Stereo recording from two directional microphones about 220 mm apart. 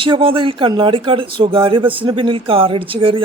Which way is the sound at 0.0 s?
25° right (ahead or behind).